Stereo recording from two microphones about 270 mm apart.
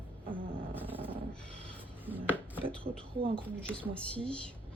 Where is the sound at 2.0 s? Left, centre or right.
Centre.